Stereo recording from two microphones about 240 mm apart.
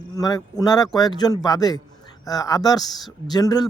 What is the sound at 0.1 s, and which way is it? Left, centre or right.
Speech, centre.